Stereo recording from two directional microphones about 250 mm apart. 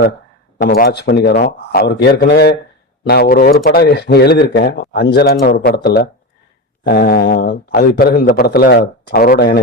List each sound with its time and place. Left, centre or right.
0.6 s a man's voice: left